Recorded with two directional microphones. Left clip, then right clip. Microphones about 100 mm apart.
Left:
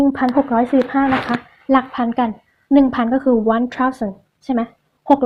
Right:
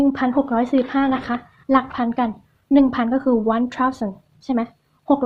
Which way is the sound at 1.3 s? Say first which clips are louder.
Left 2 dB; 20° left (ahead or behind).